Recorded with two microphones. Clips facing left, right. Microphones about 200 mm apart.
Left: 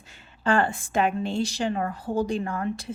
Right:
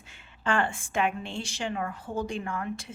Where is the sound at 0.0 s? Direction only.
40° left (ahead or behind).